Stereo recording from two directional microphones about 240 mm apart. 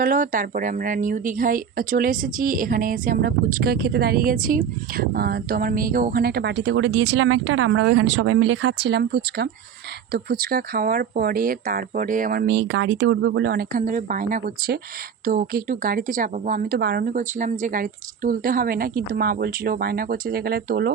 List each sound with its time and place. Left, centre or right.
0.0 s a woman's voice: right